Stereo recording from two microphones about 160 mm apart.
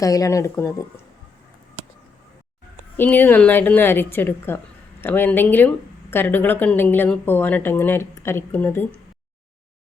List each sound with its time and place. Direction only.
0.0 s speech: 20° left (ahead or behind)
3.0 s a woman's voice: 10° left (ahead or behind)